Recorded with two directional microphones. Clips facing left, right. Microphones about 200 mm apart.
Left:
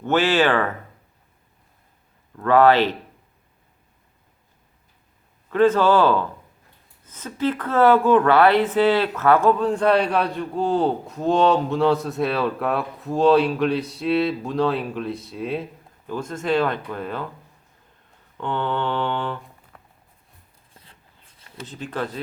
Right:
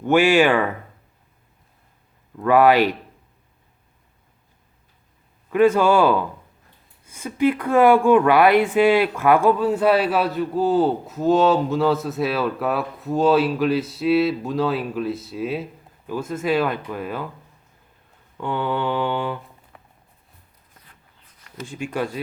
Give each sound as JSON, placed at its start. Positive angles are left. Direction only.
{"t": 0.0, "sound": "speech", "side_deg": -10}
{"t": 2.3, "sound": "speech", "side_deg": -10}
{"t": 5.5, "sound": "speech", "side_deg": -10}
{"t": 18.3, "sound": "speech", "side_deg": -10}
{"t": 20.8, "sound": "writing", "side_deg": 30}
{"t": 21.3, "sound": "a sound", "side_deg": 25}
{"t": 21.7, "sound": "speech", "side_deg": -10}